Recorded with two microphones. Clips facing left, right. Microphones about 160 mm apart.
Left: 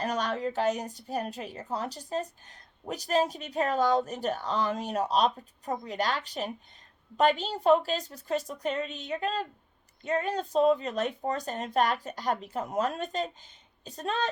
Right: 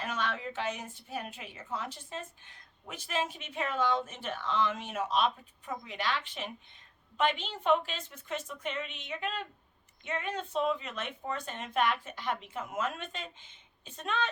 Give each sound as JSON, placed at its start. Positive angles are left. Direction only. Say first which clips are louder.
{"t": 0.0, "sound": "a woman's voice", "louder": "left 6 dB", "side_deg": 40}